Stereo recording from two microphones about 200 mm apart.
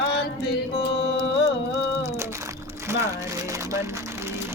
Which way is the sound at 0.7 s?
60° left (ahead or behind).